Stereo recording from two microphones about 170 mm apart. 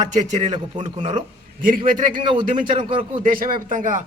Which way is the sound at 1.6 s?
55° right (ahead or behind).